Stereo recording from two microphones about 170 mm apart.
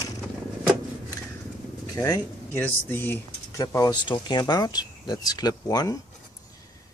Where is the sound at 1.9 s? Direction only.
20° left (ahead or behind).